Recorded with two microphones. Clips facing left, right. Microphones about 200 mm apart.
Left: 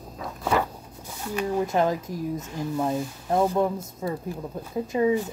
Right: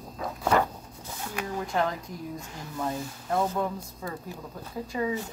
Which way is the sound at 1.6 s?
20° left (ahead or behind).